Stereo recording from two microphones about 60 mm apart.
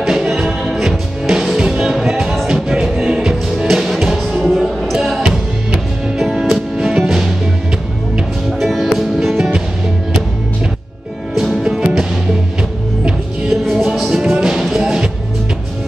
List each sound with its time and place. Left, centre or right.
0.0 s music: centre
8.5 s music: centre
11.3 s music: centre
13.5 s music: centre